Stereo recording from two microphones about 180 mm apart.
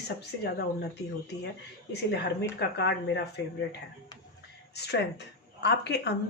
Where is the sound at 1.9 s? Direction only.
70° left (ahead or behind).